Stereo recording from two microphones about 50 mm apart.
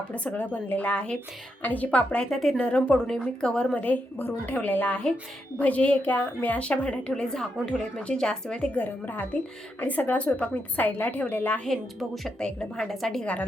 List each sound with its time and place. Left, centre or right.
0.1 s speech: left
1.6 s a woman's voice: left
2.3 s a woman's voice: centre
2.6 s speech: left
3.8 s a woman's voice: left
6.6 s speech: left
8.8 s a woman's voice: left
11.9 s a woman's voice: centre
12.5 s speech: centre
12.9 s a woman's voice: centre